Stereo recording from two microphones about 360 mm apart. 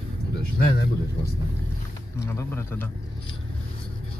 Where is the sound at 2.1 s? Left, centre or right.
Centre.